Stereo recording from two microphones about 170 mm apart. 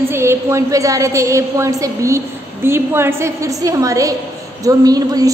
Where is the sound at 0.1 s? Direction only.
15° right (ahead or behind).